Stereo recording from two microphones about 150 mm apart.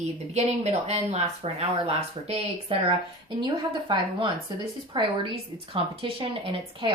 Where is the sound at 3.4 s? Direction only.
30° right (ahead or behind).